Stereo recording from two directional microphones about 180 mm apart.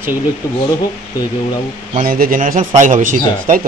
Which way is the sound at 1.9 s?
50° right (ahead or behind).